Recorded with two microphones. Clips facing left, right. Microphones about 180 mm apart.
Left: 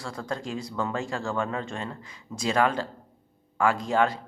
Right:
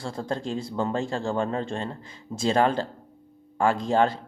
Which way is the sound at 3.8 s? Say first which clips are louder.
Right 2 dB; 30° right (ahead or behind).